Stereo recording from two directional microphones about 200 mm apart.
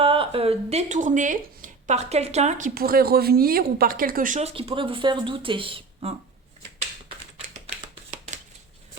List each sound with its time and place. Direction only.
0.0 s speech: 25° right (ahead or behind)